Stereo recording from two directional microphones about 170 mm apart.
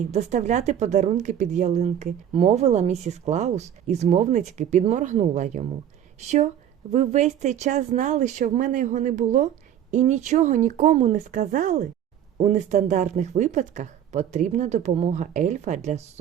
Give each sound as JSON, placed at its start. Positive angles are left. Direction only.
{"t": 0.1, "sound": "speech", "side_deg": -45}